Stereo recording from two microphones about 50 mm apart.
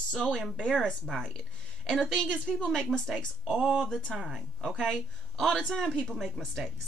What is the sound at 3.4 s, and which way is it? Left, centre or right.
Speech, centre.